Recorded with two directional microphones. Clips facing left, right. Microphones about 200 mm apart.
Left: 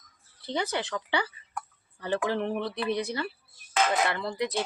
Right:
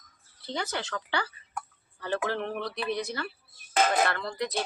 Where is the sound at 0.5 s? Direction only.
15° left (ahead or behind).